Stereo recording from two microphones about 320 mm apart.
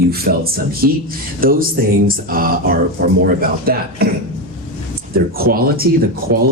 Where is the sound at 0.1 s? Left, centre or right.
Right.